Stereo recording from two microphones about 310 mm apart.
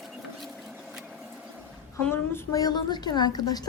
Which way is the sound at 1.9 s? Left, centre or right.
Centre.